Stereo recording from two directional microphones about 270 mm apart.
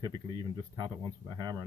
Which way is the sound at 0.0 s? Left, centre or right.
Centre.